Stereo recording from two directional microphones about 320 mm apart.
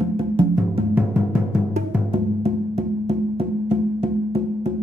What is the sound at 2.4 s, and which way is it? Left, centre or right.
Music, centre.